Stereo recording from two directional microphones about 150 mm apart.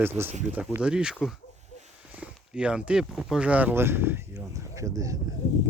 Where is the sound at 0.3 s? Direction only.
50° right (ahead or behind).